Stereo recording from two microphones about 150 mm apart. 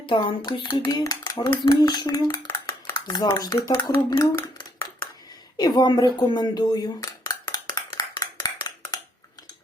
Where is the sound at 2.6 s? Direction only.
25° left (ahead or behind).